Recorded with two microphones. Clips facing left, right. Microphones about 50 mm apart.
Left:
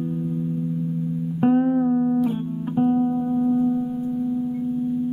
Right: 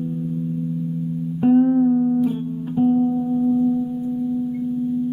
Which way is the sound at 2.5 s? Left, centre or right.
Centre.